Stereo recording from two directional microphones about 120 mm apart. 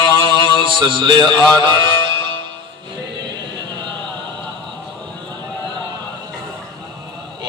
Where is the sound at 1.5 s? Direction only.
40° right (ahead or behind).